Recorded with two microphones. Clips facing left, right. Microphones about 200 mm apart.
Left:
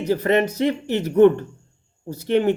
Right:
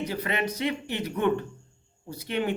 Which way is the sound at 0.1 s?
40° left (ahead or behind).